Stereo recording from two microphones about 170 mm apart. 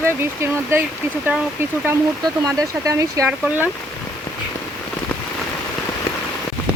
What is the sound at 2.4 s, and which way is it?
Speech, 20° right (ahead or behind).